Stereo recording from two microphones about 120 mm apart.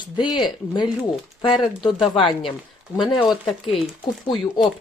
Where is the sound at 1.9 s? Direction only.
Centre (ahead or behind).